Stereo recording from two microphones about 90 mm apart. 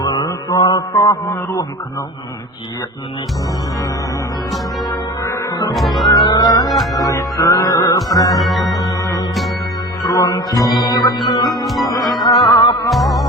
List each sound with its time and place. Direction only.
0.0 s mantra: 55° left (ahead or behind)
0.9 s music: 35° left (ahead or behind)
5.7 s music: centre (ahead or behind)
6.2 s music: 50° left (ahead or behind)
8.4 s music: centre (ahead or behind)
8.8 s music: 40° left (ahead or behind)
11.6 s music: centre (ahead or behind)
12.2 s music: 55° left (ahead or behind)
12.9 s music: centre (ahead or behind)